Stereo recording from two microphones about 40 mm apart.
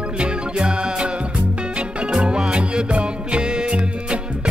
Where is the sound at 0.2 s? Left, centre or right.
Right.